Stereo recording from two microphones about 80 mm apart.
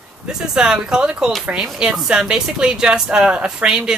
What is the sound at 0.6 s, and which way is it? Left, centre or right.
Speech, centre.